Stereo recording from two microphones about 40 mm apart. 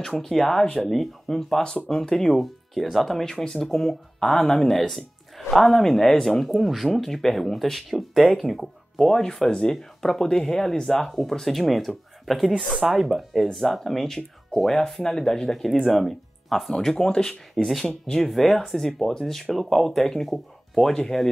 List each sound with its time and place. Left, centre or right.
0.0 s speech: centre
17.6 s speech: centre